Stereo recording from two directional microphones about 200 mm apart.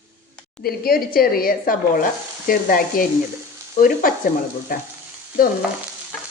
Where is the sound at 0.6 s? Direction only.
50° left (ahead or behind).